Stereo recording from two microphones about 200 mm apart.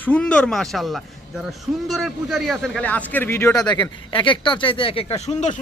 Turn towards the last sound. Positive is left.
turn(degrees=35)  # may be behind; listen again after turning